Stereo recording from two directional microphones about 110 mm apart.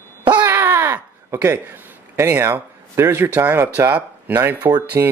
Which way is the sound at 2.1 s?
20° right (ahead or behind).